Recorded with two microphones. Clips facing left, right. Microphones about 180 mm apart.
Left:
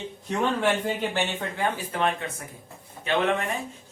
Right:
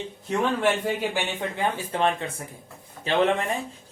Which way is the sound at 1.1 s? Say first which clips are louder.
Even; 15° right (ahead or behind).